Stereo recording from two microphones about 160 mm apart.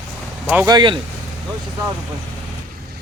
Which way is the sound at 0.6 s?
30° right (ahead or behind).